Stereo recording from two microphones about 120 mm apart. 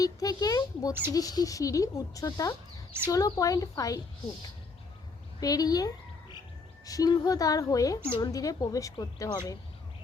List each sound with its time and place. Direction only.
0.0 s a child's voice: 30° left (ahead or behind)
5.4 s a child's voice: 30° left (ahead or behind)